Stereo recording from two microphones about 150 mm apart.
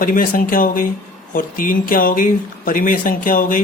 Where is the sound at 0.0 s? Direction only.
70° left (ahead or behind).